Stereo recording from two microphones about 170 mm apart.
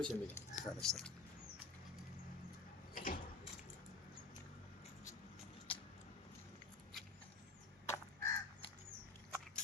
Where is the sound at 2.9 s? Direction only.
55° left (ahead or behind).